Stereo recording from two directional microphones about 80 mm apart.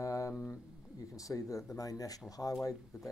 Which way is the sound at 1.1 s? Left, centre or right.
Left.